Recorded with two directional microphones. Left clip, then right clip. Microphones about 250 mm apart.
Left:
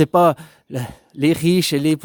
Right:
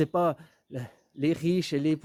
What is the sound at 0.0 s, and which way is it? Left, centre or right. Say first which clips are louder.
Speech: left 12 dB; left.